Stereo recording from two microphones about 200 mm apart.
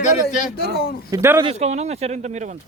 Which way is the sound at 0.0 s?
40° left (ahead or behind).